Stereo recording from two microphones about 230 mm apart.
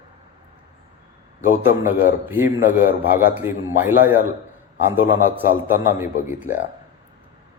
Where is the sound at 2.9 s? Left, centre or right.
Left.